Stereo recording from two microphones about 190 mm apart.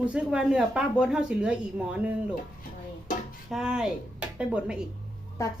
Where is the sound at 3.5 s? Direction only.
5° right (ahead or behind).